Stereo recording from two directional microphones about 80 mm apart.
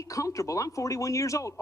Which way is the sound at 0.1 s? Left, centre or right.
Left.